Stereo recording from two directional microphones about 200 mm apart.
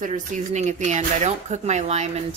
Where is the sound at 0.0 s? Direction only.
40° right (ahead or behind).